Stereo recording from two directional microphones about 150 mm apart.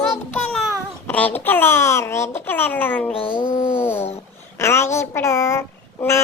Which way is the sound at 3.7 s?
15° left (ahead or behind).